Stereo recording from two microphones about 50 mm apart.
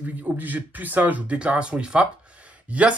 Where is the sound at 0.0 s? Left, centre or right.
Right.